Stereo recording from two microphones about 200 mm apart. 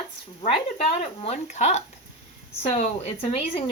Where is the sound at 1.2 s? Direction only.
35° left (ahead or behind).